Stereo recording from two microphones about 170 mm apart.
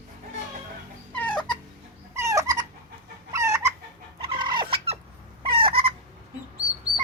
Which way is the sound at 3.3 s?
15° right (ahead or behind).